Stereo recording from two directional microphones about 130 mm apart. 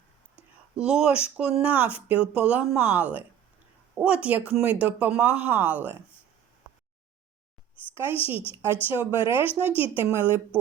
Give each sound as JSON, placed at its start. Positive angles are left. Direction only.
{"t": 0.3, "sound": "a sound", "side_deg": -5}
{"t": 1.4, "sound": "speech", "side_deg": -10}
{"t": 7.9, "sound": "speech", "side_deg": -15}